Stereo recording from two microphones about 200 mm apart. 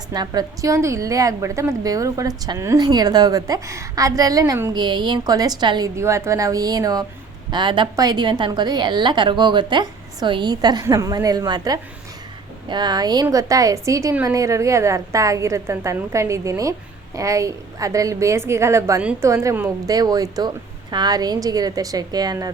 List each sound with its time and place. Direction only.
0.1 s a woman's voice: 20° right (ahead or behind)